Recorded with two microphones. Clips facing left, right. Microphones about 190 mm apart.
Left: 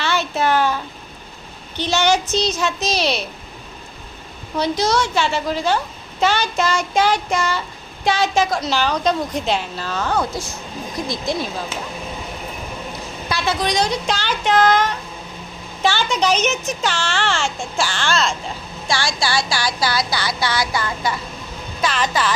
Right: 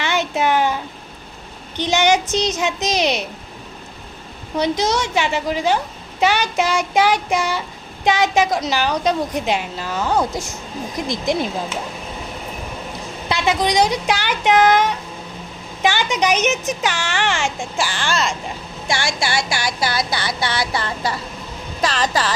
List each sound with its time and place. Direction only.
0.0 s a sound: 15° right (ahead or behind)
1.7 s a child's voice: 15° right (ahead or behind)
4.5 s a child's voice: 20° right (ahead or behind)
13.2 s a child's voice: 20° right (ahead or behind)
18.9 s a sound: 20° right (ahead or behind)
21.8 s speech: 35° right (ahead or behind)